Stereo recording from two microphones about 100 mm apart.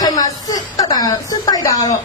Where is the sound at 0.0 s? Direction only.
40° left (ahead or behind).